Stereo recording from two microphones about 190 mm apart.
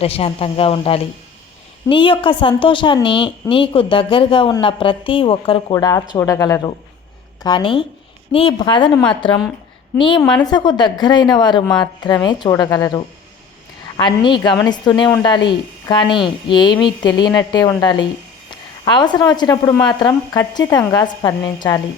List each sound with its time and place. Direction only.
0.0 s a woman's voice: 30° left (ahead or behind)
10.0 s a woman's voice: 25° left (ahead or behind)